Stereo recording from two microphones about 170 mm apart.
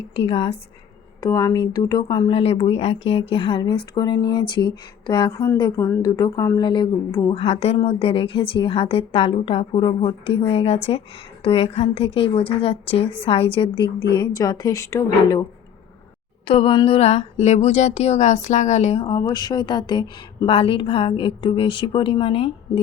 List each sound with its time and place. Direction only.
0.1 s a woman's voice: 35° left (ahead or behind)
1.2 s speech: 20° left (ahead or behind)
7.3 s a woman's voice: 40° left (ahead or behind); by 15.4 s 15° left (ahead or behind)
16.5 s a woman's voice: 30° left (ahead or behind)
19.0 s a woman's voice: 25° left (ahead or behind)